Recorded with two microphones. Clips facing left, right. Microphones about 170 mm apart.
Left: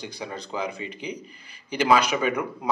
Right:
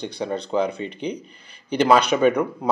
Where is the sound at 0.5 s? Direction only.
40° right (ahead or behind).